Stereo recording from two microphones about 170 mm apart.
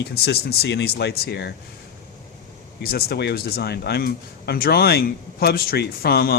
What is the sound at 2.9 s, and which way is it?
Speech, 70° left (ahead or behind).